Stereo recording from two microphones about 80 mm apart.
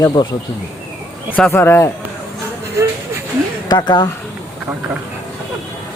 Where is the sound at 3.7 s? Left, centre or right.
Left.